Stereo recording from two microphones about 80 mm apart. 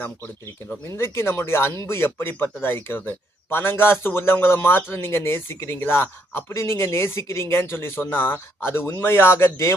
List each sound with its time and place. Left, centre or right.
0.9 s speech: left